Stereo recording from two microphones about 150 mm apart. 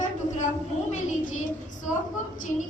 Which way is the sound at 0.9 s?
55° left (ahead or behind).